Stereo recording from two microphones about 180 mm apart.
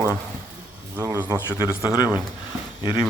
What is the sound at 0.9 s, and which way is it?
Speech, 10° right (ahead or behind).